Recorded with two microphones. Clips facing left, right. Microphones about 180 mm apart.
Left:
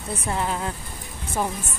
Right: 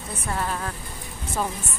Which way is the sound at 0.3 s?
20° left (ahead or behind).